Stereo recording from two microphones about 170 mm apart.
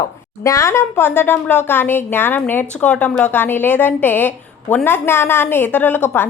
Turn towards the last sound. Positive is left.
turn(degrees=10)  # may be behind; listen again after turning